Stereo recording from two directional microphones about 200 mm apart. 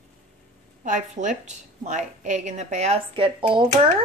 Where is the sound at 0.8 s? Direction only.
40° right (ahead or behind).